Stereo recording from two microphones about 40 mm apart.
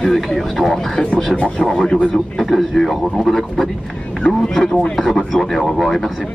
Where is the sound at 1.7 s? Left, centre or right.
Centre.